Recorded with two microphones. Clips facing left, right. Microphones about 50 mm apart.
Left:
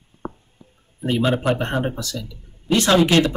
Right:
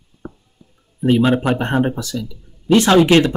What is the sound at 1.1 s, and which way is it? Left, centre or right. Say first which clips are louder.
Speech: right 2 dB; right.